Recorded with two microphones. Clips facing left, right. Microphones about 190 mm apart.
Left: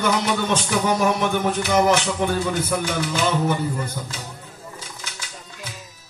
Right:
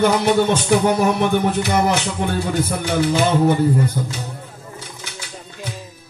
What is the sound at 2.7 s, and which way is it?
Music, 55° right (ahead or behind).